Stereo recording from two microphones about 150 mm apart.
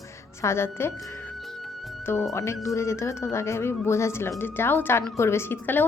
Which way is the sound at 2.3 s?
20° left (ahead or behind).